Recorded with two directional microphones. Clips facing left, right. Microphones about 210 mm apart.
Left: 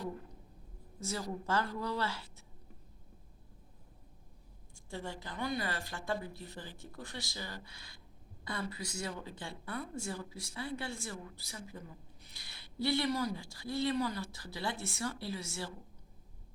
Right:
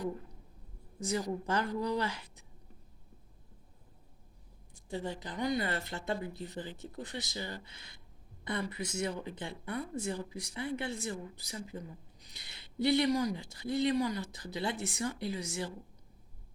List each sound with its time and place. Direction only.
0.9 s a woman's voice: 15° right (ahead or behind)
4.7 s speech: 20° right (ahead or behind)